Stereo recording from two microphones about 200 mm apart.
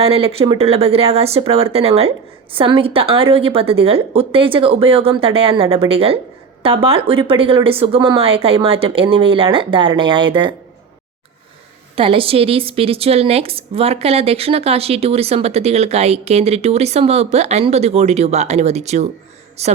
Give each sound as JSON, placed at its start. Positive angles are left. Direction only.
{"t": 0.0, "sound": "a woman's voice", "side_deg": -30}
{"t": 11.9, "sound": "a woman's voice", "side_deg": -25}